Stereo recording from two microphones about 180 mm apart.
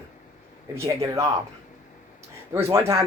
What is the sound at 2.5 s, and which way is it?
Speech, 15° right (ahead or behind).